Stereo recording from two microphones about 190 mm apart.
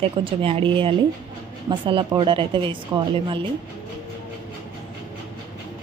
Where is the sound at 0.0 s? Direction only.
30° right (ahead or behind).